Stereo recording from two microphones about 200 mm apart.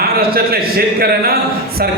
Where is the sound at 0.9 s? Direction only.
50° right (ahead or behind).